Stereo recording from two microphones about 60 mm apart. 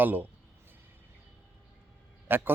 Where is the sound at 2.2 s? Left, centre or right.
Right.